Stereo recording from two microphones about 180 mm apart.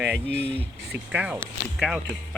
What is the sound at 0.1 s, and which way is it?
Speech, 80° right.